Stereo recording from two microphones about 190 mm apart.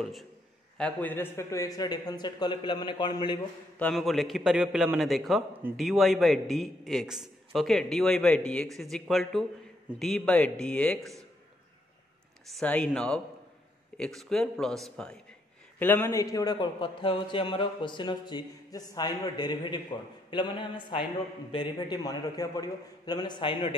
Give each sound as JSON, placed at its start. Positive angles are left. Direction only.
{"t": 0.0, "sound": "a man's voice", "side_deg": 0}
{"t": 3.8, "sound": "a man's voice", "side_deg": 0}
{"t": 12.4, "sound": "a man's voice", "side_deg": 5}